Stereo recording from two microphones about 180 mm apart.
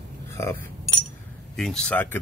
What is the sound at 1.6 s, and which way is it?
Speech, 5° left (ahead or behind).